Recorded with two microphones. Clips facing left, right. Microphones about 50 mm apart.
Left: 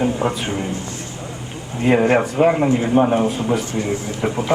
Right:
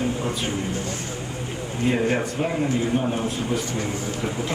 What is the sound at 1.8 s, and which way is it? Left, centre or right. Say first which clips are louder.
A man's voice: left 7 dB; left.